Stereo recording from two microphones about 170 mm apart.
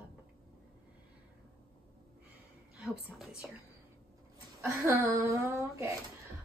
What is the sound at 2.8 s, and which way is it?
Speech, 5° right (ahead or behind).